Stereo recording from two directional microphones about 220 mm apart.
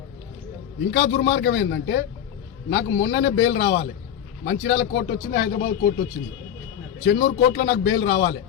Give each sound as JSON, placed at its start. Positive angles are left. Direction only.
{"t": 0.9, "sound": "a man's voice", "side_deg": 55}
{"t": 7.3, "sound": "speech", "side_deg": 50}